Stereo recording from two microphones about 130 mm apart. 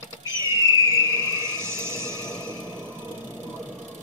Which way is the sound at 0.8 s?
20° right (ahead or behind).